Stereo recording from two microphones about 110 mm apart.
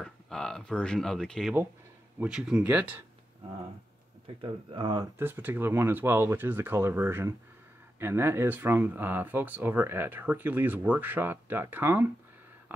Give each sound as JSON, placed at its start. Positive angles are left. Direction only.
{"t": 0.0, "sound": "speech", "side_deg": 5}
{"t": 2.1, "sound": "speech", "side_deg": -5}
{"t": 4.4, "sound": "speech", "side_deg": -45}
{"t": 5.2, "sound": "speech", "side_deg": -20}